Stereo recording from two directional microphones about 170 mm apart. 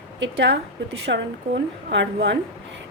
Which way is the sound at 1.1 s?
90° right.